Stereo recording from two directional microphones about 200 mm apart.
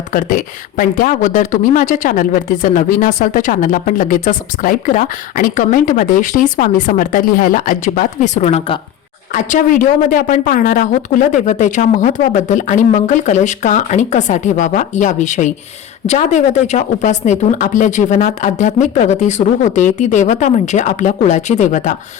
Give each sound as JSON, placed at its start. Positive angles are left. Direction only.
{"t": 0.1, "sound": "speech", "side_deg": 40}
{"t": 9.3, "sound": "speech", "side_deg": 40}